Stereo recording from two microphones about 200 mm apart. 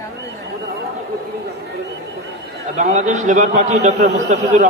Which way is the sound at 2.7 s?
35° right (ahead or behind).